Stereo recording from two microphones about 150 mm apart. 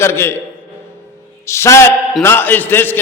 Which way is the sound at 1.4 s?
20° left (ahead or behind).